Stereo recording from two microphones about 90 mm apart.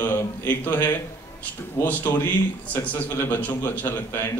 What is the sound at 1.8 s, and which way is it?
A man's voice, 25° left (ahead or behind).